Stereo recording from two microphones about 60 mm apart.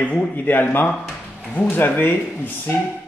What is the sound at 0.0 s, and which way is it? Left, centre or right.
Speech, left.